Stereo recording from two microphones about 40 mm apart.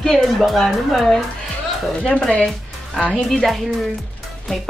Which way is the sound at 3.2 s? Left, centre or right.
Centre.